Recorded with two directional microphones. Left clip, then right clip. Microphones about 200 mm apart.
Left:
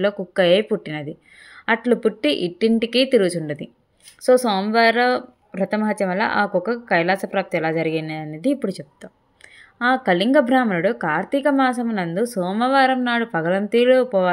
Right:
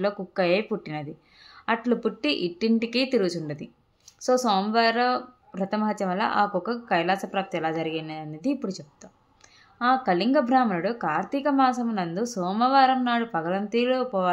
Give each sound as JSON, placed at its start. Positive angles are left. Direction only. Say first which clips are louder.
{"t": 0.0, "sound": "a woman's voice", "louder": "left 7 dB", "side_deg": 20}